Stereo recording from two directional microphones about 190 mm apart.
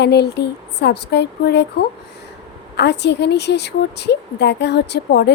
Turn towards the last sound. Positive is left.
turn(degrees=60)  # may be behind; listen again after turning